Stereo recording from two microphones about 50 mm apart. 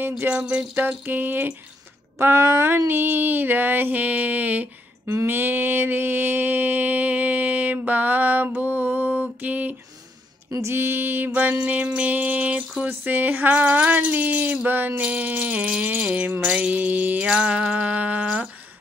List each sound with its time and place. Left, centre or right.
0.7 s mantra: right
2.1 s mantra: right
5.2 s mantra: right
10.6 s music: right
11.5 s music: right
12.8 s mantra: right
15.0 s music: right
17.3 s music: right
18.2 s humming: centre